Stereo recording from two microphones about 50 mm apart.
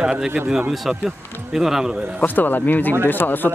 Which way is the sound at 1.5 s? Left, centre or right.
Centre.